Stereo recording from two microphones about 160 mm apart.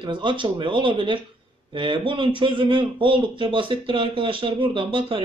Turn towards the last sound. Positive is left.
turn(degrees=-35)  # may be behind; listen again after turning